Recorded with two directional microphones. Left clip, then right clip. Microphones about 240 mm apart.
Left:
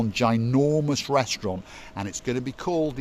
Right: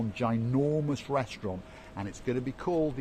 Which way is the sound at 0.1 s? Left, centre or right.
Left.